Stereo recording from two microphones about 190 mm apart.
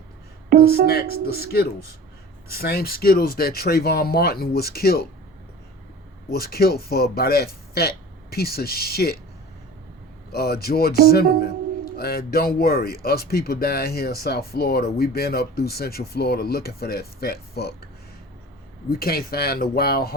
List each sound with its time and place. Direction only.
0.5 s speech: 55° right (ahead or behind)
0.9 s a man's voice: 55° left (ahead or behind)
6.3 s a man's voice: 55° left (ahead or behind)
10.3 s a man's voice: 55° left (ahead or behind)
18.9 s a man's voice: 50° left (ahead or behind)